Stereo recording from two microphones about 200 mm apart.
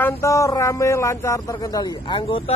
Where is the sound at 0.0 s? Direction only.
15° left (ahead or behind).